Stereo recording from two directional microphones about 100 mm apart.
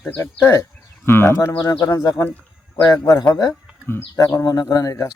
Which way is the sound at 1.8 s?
40° left (ahead or behind).